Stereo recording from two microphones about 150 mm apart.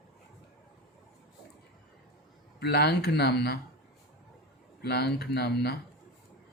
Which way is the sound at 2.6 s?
90° left.